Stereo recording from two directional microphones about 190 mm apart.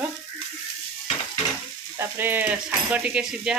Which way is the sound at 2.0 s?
10° right (ahead or behind).